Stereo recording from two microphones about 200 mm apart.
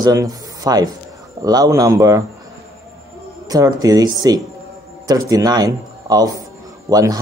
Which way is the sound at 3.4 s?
20° right (ahead or behind).